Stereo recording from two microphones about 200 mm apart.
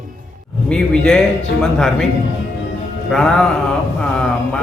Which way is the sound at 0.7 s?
Centre (ahead or behind).